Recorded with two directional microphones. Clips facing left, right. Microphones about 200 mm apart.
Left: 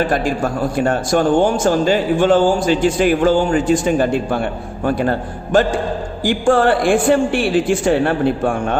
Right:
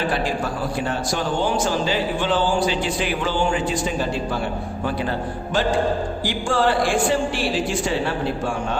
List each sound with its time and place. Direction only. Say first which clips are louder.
0.1 s a man's voice: left 5 dB; 50° left (ahead or behind)